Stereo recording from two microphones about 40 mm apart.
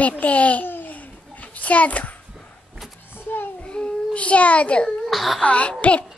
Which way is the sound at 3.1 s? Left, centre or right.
Left.